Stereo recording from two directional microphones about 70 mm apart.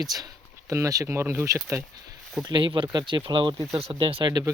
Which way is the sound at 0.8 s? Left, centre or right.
Right.